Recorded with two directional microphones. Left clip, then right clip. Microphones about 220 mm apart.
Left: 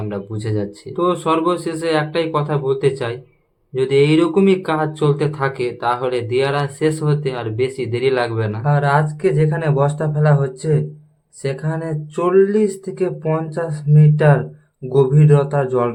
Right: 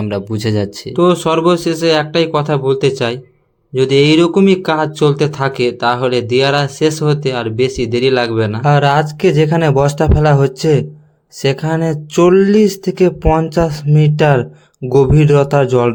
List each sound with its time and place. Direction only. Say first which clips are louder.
0.0 s speech: right 7 dB; 35° right (ahead or behind)